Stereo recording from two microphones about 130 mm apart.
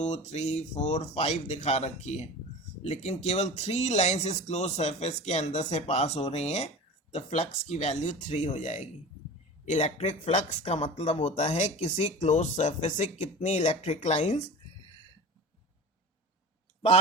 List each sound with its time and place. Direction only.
0.0 s speech: 60° left (ahead or behind)